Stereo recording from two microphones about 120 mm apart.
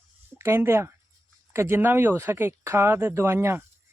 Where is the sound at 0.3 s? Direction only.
20° right (ahead or behind).